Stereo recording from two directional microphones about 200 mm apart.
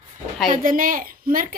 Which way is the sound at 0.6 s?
45° right (ahead or behind).